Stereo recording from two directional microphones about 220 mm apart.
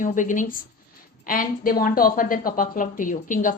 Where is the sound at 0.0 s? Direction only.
35° left (ahead or behind).